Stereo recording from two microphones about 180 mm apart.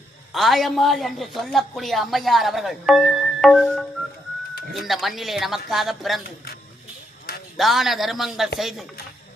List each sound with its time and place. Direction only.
0.3 s a woman's voice: centre (ahead or behind)
6.2 s speech: 60° left (ahead or behind)
7.5 s a woman's voice: centre (ahead or behind)